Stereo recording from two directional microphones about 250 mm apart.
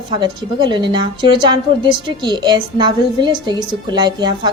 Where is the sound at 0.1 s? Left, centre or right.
Centre.